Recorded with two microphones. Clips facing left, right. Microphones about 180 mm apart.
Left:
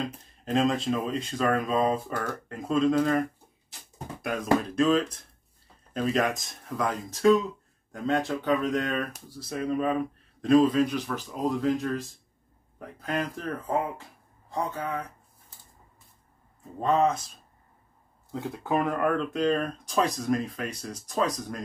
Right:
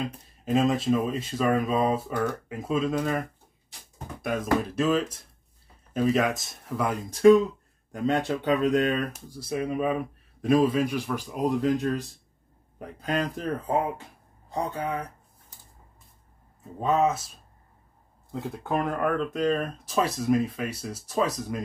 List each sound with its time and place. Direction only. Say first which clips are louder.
0.0 s a man's voice: right 1 dB; 5° right (ahead or behind)
12.7 s a man's voice: right 2 dB; 20° right (ahead or behind)
16.8 s speech: even; 5° right (ahead or behind)
18.3 s speech: left 1 dB; centre (ahead or behind)